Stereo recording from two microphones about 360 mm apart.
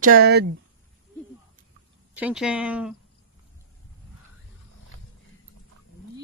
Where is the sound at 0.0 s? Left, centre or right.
Right.